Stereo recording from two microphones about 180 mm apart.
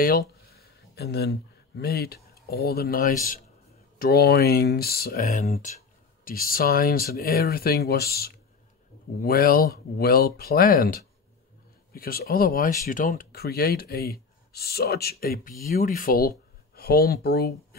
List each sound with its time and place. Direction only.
0.5 s speech: 60° left (ahead or behind)
5.4 s speech: 40° left (ahead or behind)
6.2 s speech: 55° left (ahead or behind)